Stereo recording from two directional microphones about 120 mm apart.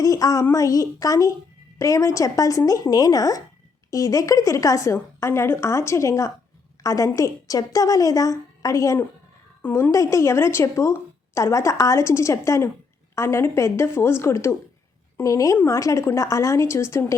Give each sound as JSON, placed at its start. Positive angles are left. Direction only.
{"t": 0.0, "sound": "a woman's voice", "side_deg": 30}